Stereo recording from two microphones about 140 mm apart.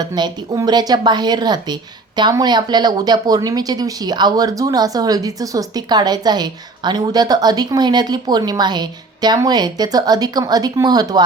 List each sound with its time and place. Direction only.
0.0 s speech: 30° right (ahead or behind)